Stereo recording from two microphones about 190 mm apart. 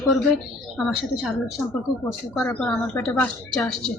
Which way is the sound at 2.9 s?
5° left (ahead or behind).